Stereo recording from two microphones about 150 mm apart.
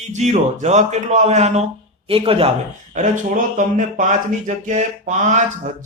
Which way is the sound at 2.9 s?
60° right (ahead or behind).